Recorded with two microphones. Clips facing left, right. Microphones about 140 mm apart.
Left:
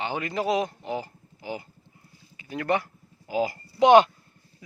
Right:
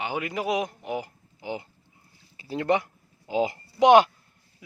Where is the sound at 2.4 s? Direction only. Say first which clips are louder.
Right 3 dB; 30° right (ahead or behind).